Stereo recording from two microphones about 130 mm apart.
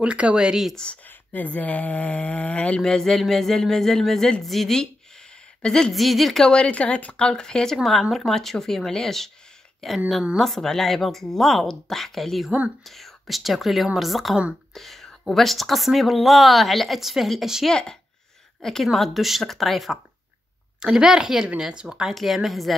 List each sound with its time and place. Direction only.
0.0 s speech: 10° right (ahead or behind)